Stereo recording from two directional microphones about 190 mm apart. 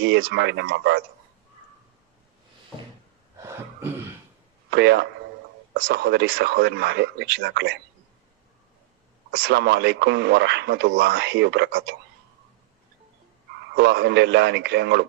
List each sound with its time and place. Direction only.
0.0 s speech: 60° right (ahead or behind)
3.3 s a sound: 15° right (ahead or behind)
4.7 s speech: 65° right (ahead or behind)
9.3 s speech: 60° right (ahead or behind)
13.7 s speech: 60° right (ahead or behind)